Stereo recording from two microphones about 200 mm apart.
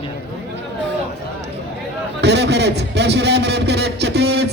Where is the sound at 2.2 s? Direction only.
60° right (ahead or behind).